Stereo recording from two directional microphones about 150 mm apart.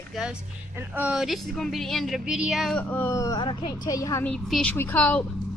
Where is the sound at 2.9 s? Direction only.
10° left (ahead or behind).